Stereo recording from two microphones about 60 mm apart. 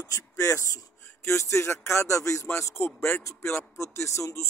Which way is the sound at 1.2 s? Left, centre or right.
Left.